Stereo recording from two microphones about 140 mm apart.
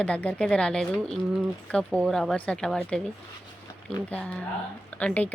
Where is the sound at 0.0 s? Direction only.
10° left (ahead or behind).